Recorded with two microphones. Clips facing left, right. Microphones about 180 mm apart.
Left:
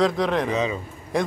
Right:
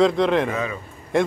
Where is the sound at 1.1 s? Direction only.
Centre (ahead or behind).